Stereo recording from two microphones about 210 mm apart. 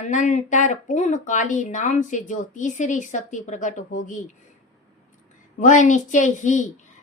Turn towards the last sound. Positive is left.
turn(degrees=35)  # may be behind; listen again after turning